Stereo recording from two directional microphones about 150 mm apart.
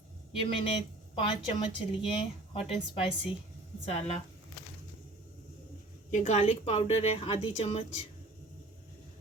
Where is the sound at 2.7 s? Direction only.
35° left (ahead or behind).